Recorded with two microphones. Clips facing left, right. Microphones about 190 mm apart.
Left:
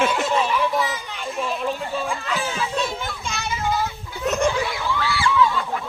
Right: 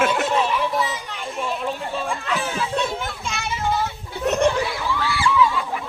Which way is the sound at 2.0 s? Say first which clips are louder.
Right 1 dB; centre (ahead or behind).